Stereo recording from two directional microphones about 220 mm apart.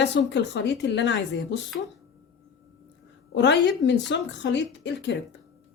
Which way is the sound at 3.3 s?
50° left (ahead or behind).